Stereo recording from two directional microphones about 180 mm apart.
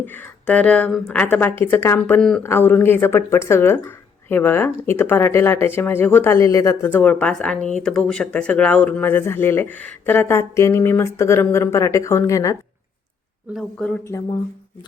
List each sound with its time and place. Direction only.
0.0 s speech: 10° left (ahead or behind)
13.5 s speech: centre (ahead or behind)